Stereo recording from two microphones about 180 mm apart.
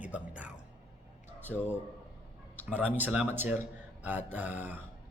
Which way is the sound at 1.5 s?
5° right (ahead or behind).